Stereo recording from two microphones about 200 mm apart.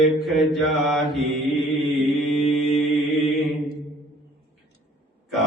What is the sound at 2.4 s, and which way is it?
Mantra, 30° left (ahead or behind).